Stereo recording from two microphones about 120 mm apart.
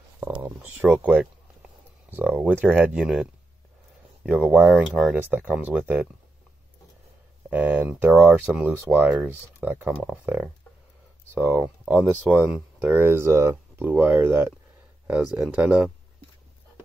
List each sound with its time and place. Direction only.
0.6 s speech: 15° right (ahead or behind)
7.4 s speech: 15° right (ahead or behind)
15.0 s speech: 5° right (ahead or behind)